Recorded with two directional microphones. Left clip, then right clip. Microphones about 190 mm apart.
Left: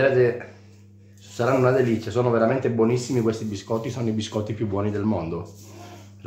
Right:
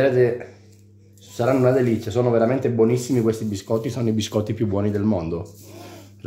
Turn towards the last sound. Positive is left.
turn(degrees=-35)  # may be behind; listen again after turning